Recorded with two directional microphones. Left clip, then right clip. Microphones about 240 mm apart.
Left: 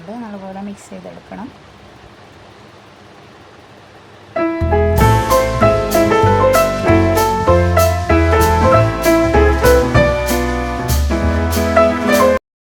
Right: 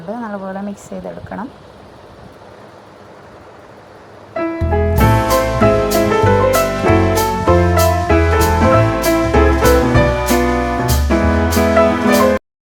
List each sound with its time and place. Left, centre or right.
1.3 s speech: centre
4.4 s music: centre